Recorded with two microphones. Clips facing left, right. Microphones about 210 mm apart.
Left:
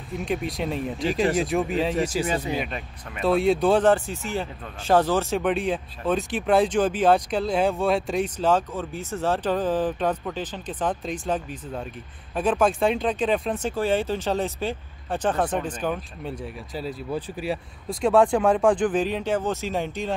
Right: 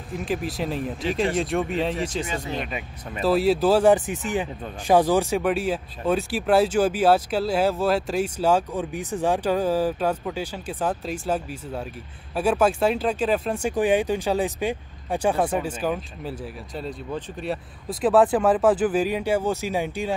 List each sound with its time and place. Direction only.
0.1 s speech: centre (ahead or behind)
3.9 s speech: 15° right (ahead or behind)
5.4 s speech: 5° right (ahead or behind)
13.6 s speech: 15° right (ahead or behind)